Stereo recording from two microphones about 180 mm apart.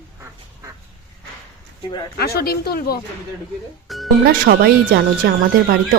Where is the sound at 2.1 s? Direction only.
60° left (ahead or behind).